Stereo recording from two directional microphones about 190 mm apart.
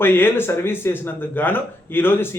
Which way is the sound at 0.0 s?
10° left (ahead or behind).